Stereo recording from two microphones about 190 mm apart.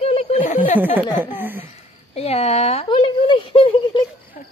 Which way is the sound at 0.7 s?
10° right (ahead or behind).